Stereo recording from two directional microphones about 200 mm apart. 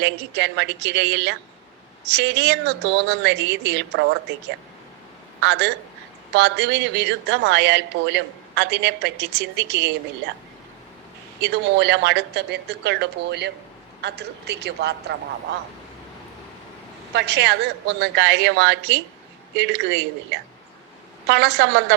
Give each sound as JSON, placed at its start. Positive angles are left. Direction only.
{"t": 0.0, "sound": "speech", "side_deg": -60}
{"t": 5.4, "sound": "a man's voice", "side_deg": -60}
{"t": 11.3, "sound": "speech", "side_deg": -60}
{"t": 17.2, "sound": "speech", "side_deg": -60}